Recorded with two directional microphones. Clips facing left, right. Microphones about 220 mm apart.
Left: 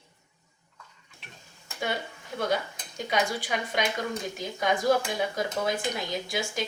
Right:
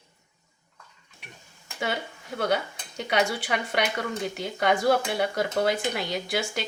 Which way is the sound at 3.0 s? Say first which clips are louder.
Right 3 dB; 70° right (ahead or behind).